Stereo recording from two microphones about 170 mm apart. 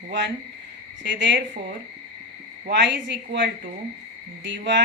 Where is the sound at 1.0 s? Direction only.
90° right.